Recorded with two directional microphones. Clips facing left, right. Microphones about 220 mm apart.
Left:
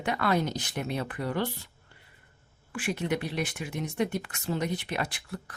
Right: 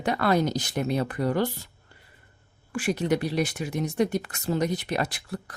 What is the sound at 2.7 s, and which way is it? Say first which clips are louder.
Speech: right 5 dB; 40° right (ahead or behind).